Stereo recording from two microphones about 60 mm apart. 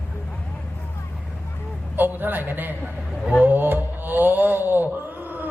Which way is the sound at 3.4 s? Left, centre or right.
Right.